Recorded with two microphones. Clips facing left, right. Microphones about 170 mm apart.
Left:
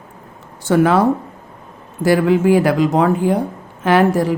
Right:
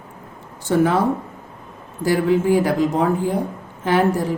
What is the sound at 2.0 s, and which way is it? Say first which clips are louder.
Speech: left 4 dB; 80° left.